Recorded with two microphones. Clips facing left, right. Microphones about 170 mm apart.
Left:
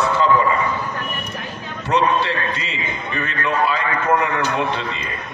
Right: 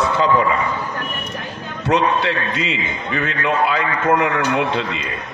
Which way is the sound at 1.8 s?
65° right (ahead or behind).